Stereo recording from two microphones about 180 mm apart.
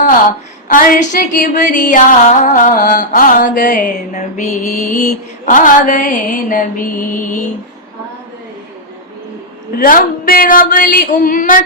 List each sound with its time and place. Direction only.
0.7 s music: 50° left (ahead or behind)
9.7 s music: 55° left (ahead or behind)